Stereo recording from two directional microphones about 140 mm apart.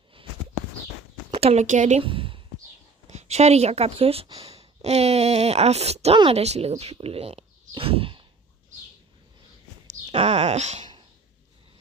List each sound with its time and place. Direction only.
1.3 s speech: 45° right (ahead or behind)
2.0 s a sound: 40° right (ahead or behind)
3.1 s a woman's voice: 50° right (ahead or behind)
10.2 s speech: 50° right (ahead or behind)